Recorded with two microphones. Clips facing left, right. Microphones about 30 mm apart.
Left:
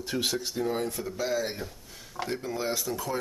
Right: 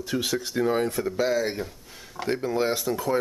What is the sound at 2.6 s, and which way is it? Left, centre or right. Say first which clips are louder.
Speech: right 5 dB; right.